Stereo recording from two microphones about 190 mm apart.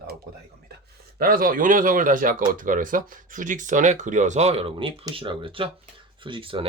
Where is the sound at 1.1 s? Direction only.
50° right (ahead or behind).